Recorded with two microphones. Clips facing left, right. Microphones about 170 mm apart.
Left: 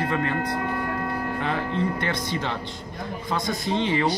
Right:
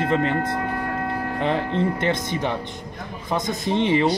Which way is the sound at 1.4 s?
20° right (ahead or behind).